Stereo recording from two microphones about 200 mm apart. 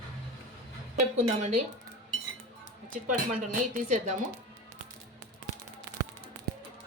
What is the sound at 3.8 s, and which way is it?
Speech, 35° right (ahead or behind).